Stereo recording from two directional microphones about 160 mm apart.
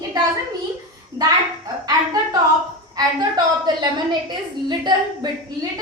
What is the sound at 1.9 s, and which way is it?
A woman's voice, 25° right (ahead or behind).